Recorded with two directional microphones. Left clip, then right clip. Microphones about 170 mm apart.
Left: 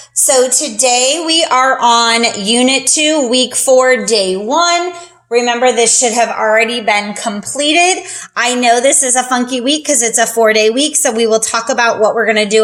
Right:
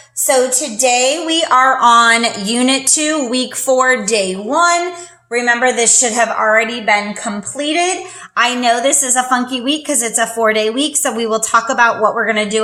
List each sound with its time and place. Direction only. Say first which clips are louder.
0.3 s a woman's voice: left 2 dB; 40° left (ahead or behind)